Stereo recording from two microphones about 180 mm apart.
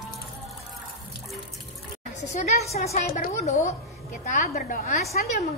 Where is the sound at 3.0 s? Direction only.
50° left (ahead or behind).